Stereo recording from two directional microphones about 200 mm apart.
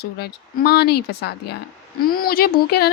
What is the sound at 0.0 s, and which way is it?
A woman's voice, 50° left (ahead or behind).